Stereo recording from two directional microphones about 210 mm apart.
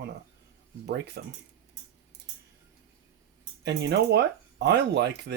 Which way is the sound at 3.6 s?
55° right (ahead or behind).